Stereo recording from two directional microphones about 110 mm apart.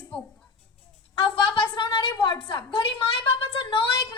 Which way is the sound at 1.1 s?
50° left (ahead or behind).